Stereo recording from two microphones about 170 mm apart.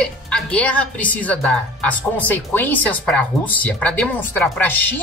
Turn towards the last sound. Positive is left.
turn(degrees=10)  # may be behind; listen again after turning